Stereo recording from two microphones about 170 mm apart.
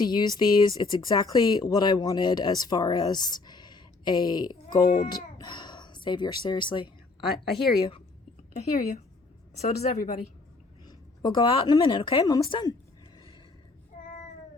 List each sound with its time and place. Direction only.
0.0 s speech: 25° left (ahead or behind)
7.3 s speech: centre (ahead or behind)
8.5 s a woman's voice: 50° left (ahead or behind)
9.6 s speech: 40° left (ahead or behind)
10.8 s a woman's voice: 25° left (ahead or behind)